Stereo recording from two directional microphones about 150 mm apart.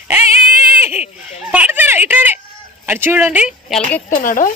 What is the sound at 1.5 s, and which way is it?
A woman's voice, 10° right (ahead or behind).